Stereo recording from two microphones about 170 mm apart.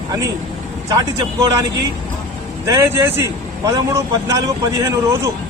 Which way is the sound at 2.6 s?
15° right (ahead or behind).